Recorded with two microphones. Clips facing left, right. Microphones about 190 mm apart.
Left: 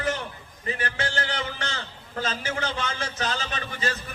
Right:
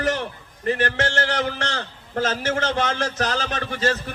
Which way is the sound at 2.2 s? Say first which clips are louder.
Right 6 dB; 80° right.